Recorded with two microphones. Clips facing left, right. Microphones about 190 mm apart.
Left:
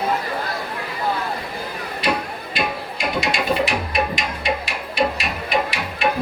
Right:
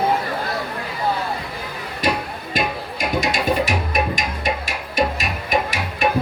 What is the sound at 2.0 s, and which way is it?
Music, 45° right (ahead or behind).